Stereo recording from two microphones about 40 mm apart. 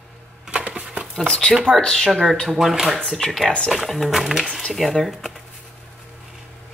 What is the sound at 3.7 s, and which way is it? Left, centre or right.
Speech, centre.